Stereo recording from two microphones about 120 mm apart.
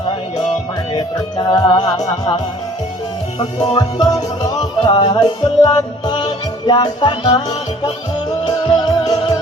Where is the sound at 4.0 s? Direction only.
35° left (ahead or behind).